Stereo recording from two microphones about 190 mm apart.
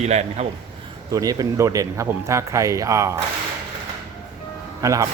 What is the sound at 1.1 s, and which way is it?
Speech, 20° right (ahead or behind).